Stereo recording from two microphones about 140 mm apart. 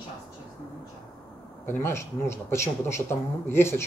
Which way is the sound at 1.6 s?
20° left (ahead or behind).